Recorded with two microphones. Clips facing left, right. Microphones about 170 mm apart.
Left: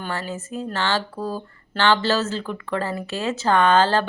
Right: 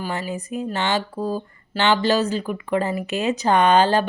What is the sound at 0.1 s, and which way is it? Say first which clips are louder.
Speech: right 2 dB; 15° right (ahead or behind).